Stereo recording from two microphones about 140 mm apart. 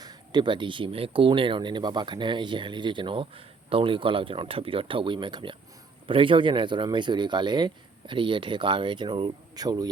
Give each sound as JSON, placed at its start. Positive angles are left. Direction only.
{"t": 0.0, "sound": "speech", "side_deg": -30}